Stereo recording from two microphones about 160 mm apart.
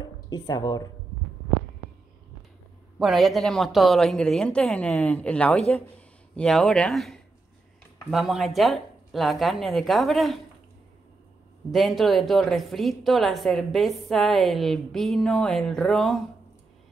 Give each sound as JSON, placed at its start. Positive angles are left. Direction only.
{"t": 0.0, "sound": "speech", "side_deg": 25}
{"t": 3.0, "sound": "a woman's voice", "side_deg": 0}
{"t": 11.7, "sound": "a woman's voice", "side_deg": 0}